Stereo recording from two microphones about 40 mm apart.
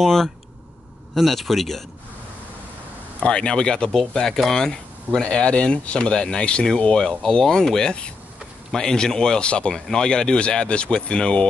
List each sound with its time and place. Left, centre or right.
1.1 s speech: centre
3.2 s speech: left
5.2 s speech: left
9.8 s speech: centre